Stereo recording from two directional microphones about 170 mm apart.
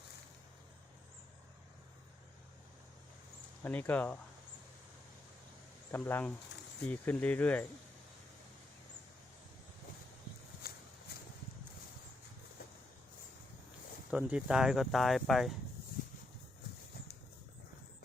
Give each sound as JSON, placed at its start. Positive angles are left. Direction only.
{"t": 3.6, "sound": "speech", "side_deg": 10}
{"t": 5.9, "sound": "speech", "side_deg": 10}
{"t": 10.6, "sound": "a sound", "side_deg": 60}
{"t": 14.1, "sound": "speech", "side_deg": -5}